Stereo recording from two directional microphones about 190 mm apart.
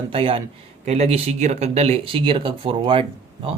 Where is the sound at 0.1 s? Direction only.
30° right (ahead or behind).